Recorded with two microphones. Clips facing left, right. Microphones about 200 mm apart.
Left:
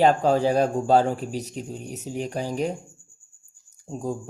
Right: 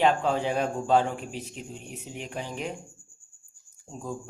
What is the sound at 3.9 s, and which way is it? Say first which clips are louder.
Speech: left 8 dB; 40° left (ahead or behind).